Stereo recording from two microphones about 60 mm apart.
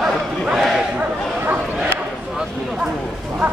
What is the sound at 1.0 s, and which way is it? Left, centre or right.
Bow-wow, right.